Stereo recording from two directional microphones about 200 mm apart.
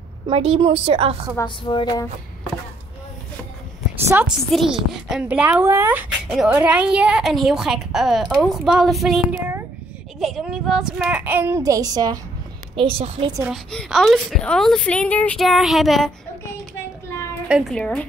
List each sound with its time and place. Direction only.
0.3 s a woman's voice: 30° right (ahead or behind)
1.3 s speech: 20° left (ahead or behind)
4.0 s a child's voice: 10° right (ahead or behind)
4.5 s a child's voice: centre (ahead or behind); by 13.3 s 30° right (ahead or behind)
13.4 s a woman's voice: centre (ahead or behind)
17.5 s a woman's voice: centre (ahead or behind)